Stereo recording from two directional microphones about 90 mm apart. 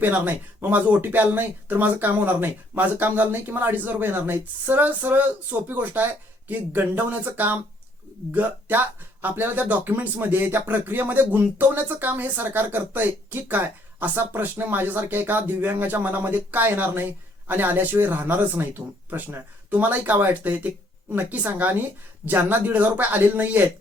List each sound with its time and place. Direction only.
0.0 s speech: 20° right (ahead or behind)